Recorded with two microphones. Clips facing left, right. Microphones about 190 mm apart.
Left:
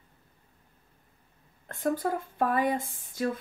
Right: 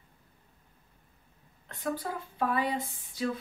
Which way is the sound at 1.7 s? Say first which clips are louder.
Left 6 dB; 50° left (ahead or behind).